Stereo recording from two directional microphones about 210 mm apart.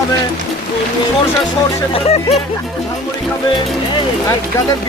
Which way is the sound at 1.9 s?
30° left (ahead or behind).